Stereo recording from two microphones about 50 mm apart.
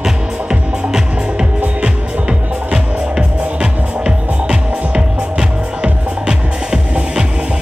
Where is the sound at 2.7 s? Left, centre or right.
Centre.